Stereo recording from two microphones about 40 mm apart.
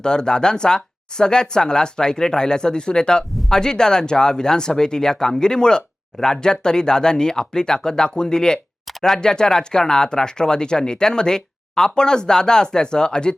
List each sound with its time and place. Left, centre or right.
0.0 s speech: left